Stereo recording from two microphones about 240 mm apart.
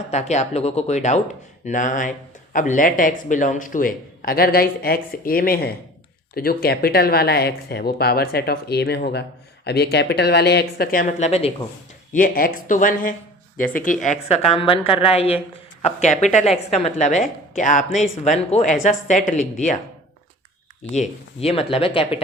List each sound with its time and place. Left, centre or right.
0.1 s a woman's voice: left
21.3 s a woman's voice: left